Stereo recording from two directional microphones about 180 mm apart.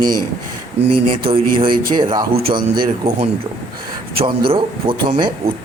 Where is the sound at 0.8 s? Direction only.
70° right (ahead or behind).